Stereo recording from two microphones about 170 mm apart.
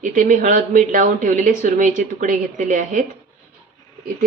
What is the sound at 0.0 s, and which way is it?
Speech, 50° right (ahead or behind).